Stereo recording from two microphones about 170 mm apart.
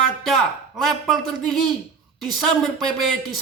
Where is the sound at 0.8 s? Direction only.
Centre (ahead or behind).